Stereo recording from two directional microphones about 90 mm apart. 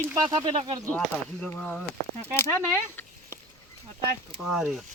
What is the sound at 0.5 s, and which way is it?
Speech, 65° right (ahead or behind).